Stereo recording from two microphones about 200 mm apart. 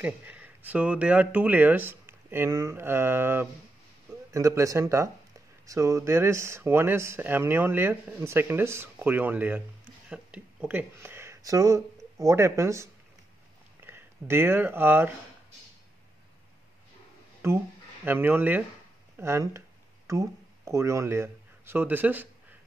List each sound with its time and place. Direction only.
0.0 s speech: 5° right (ahead or behind)
13.8 s speech: 10° right (ahead or behind)
17.4 s speech: 10° right (ahead or behind)